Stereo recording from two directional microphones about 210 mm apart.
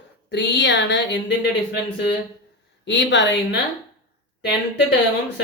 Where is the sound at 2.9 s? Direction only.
55° left (ahead or behind).